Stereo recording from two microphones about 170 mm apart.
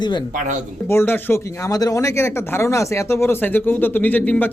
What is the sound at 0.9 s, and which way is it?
Speech, 15° left (ahead or behind).